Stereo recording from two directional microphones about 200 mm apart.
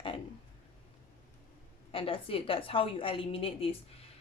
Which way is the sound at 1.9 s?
25° left (ahead or behind).